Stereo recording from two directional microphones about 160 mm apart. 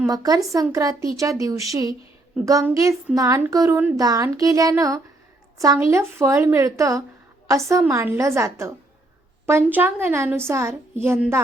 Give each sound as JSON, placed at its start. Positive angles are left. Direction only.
{"t": 0.1, "sound": "a woman's voice", "side_deg": -20}